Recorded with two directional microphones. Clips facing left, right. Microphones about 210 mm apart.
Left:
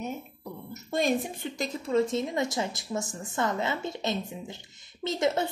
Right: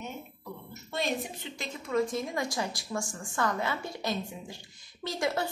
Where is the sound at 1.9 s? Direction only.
25° left (ahead or behind).